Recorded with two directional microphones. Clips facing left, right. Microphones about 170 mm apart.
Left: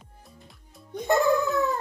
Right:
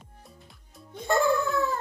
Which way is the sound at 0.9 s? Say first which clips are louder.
Left 2 dB; 20° left (ahead or behind).